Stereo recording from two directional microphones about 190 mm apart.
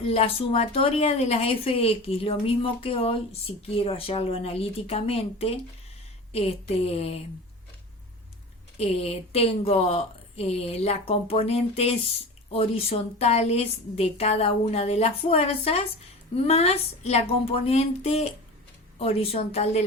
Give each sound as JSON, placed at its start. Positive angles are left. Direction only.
{"t": 0.0, "sound": "a woman's voice", "side_deg": 30}
{"t": 8.8, "sound": "a woman's voice", "side_deg": 30}